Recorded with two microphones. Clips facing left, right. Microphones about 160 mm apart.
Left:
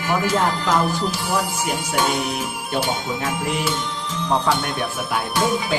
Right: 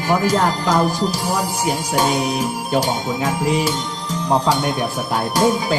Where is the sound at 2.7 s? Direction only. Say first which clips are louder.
Right 3 dB; 40° right (ahead or behind).